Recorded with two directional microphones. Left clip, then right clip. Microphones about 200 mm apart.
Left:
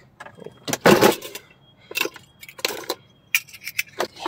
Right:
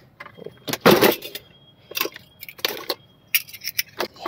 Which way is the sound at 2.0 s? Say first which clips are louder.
Left 2 dB; 10° left (ahead or behind).